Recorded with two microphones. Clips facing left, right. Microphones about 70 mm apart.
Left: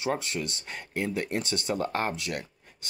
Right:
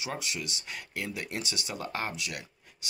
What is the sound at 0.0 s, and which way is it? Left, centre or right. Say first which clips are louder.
Speech: left 6 dB; left.